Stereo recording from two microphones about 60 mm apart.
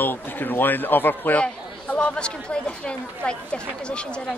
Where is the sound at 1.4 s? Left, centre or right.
Centre.